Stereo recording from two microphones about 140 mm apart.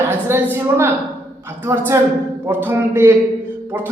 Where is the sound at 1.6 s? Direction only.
15° right (ahead or behind).